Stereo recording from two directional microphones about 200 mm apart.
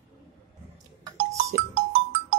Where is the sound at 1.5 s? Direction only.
45° right (ahead or behind).